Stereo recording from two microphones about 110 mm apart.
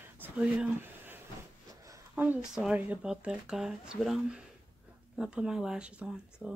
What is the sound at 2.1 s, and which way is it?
A woman's voice, 15° right (ahead or behind).